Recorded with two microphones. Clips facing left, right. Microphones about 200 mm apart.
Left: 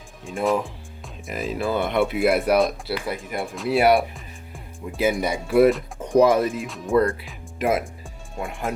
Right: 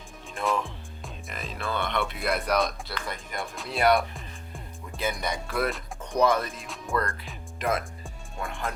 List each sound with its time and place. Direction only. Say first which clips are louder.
1.0 s speech: left 10 dB; 5° left (ahead or behind)
6.9 s speech: left 10 dB; 15° left (ahead or behind)